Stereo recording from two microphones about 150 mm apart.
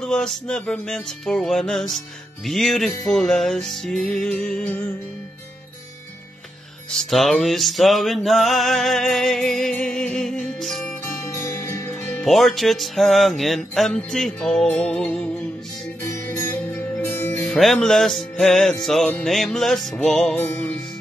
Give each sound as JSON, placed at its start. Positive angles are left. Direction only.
{"t": 0.0, "sound": "music", "side_deg": 5}
{"t": 6.9, "sound": "music", "side_deg": 0}
{"t": 11.1, "sound": "music", "side_deg": 20}
{"t": 12.3, "sound": "music", "side_deg": 0}
{"t": 17.5, "sound": "music", "side_deg": 0}
{"t": 20.3, "sound": "music", "side_deg": 15}